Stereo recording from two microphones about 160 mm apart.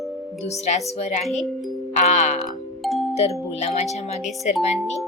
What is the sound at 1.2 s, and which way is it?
Speech, centre (ahead or behind).